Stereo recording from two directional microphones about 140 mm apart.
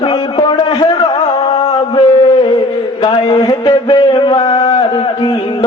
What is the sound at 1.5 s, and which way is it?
Mantra, 35° left (ahead or behind).